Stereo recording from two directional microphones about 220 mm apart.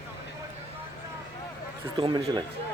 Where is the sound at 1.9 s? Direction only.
25° right (ahead or behind).